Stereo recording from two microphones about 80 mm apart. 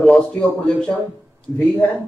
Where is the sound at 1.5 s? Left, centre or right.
Left.